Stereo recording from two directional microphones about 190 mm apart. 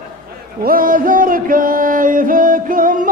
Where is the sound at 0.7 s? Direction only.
45° right (ahead or behind).